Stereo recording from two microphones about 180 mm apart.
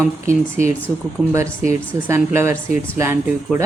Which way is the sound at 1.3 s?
15° right (ahead or behind).